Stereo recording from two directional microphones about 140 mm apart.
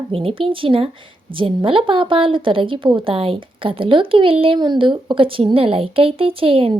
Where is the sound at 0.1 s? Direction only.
40° right (ahead or behind).